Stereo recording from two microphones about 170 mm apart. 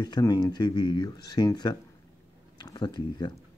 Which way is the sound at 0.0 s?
25° left (ahead or behind).